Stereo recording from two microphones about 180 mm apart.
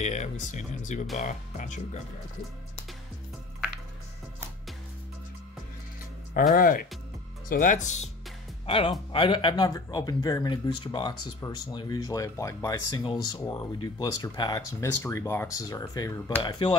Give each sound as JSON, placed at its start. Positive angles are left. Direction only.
{"t": 0.0, "sound": "speech", "side_deg": 40}
{"t": 6.3, "sound": "speech", "side_deg": 50}
{"t": 8.6, "sound": "speech", "side_deg": 30}